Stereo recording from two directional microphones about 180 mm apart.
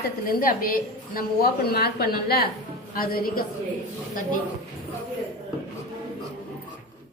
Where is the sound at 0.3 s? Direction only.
50° left (ahead or behind).